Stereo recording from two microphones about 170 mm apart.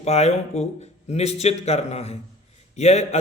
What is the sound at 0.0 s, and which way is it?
Speech, 40° left (ahead or behind).